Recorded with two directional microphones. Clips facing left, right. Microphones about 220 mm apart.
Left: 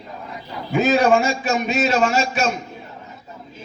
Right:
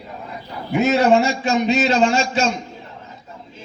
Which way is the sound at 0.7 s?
25° right (ahead or behind).